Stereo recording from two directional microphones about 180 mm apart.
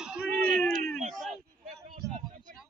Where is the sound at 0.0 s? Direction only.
5° right (ahead or behind).